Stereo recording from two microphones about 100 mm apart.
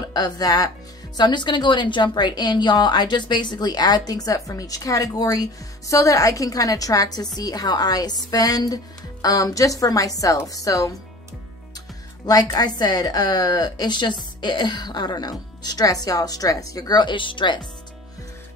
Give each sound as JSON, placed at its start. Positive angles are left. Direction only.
{"t": 0.1, "sound": "a woman's voice", "side_deg": 40}
{"t": 12.3, "sound": "a woman's voice", "side_deg": 40}